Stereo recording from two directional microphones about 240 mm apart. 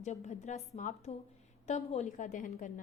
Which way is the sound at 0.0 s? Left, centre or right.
Left.